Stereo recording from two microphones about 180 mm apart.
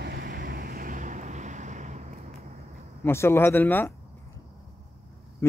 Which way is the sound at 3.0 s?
15° left (ahead or behind).